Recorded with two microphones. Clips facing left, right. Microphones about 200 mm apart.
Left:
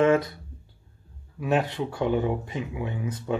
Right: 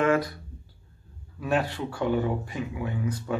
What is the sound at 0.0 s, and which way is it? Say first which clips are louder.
Speech: left 3 dB; 25° left (ahead or behind).